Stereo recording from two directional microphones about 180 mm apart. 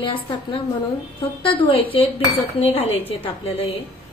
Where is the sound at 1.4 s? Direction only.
30° left (ahead or behind).